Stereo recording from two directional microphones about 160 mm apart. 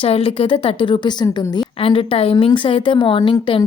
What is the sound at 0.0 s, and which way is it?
Speech, 35° left (ahead or behind).